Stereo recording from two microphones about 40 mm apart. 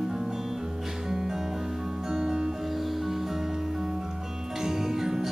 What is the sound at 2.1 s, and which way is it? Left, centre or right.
Music, centre.